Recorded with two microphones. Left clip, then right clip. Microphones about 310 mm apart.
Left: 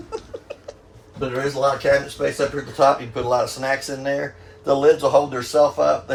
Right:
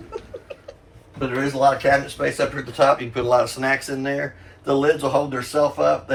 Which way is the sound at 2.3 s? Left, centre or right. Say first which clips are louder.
Right 1 dB; centre.